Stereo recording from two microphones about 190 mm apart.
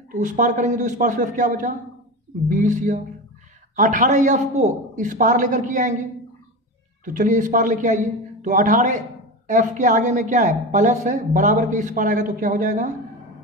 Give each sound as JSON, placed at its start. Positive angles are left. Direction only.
{"t": 0.1, "sound": "a man's voice", "side_deg": -40}
{"t": 7.1, "sound": "a man's voice", "side_deg": -45}